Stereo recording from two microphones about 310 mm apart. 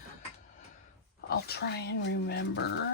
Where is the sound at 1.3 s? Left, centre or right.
Left.